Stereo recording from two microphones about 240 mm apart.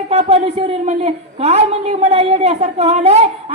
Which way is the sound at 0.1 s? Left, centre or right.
Right.